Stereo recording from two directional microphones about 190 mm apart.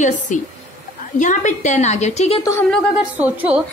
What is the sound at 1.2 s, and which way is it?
Speech, 40° left (ahead or behind).